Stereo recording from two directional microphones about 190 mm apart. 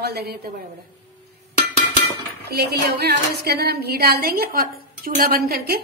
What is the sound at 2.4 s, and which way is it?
Speech, 55° right (ahead or behind).